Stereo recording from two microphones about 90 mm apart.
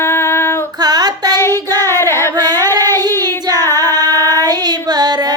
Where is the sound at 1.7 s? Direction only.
45° right (ahead or behind).